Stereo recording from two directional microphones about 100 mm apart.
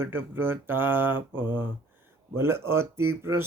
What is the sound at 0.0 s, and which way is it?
Speech, 20° right (ahead or behind).